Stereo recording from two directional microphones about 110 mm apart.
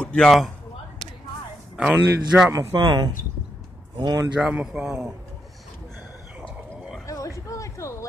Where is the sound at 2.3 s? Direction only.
15° right (ahead or behind).